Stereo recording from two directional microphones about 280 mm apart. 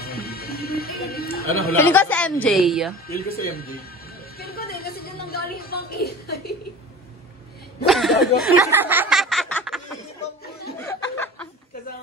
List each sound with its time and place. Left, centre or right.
0.0 s music: left
1.4 s speech: left
1.8 s a woman's voice: centre
3.1 s speech: left
4.4 s a sound: left
7.8 s chuckle: centre
8.5 s speech: centre
10.9 s a sound: centre